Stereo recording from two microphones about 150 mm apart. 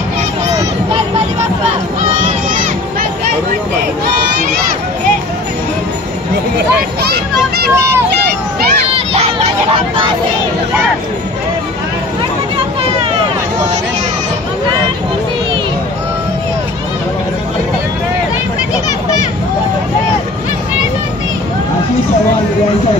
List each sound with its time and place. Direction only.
7.0 s children playing: 90° right